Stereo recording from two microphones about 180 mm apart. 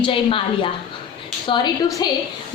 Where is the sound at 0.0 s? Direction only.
30° left (ahead or behind).